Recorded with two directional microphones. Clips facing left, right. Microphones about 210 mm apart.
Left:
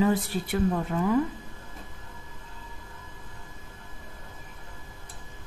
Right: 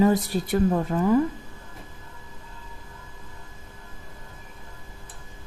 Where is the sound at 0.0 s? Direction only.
40° right (ahead or behind).